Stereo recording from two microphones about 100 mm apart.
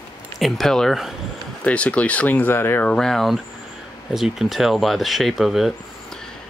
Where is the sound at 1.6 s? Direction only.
15° left (ahead or behind).